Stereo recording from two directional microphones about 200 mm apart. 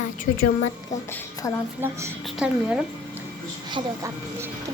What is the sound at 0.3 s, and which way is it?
Speech, 40° left (ahead or behind).